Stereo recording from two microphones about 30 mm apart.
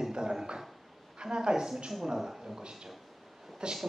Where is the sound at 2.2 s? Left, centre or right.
Centre.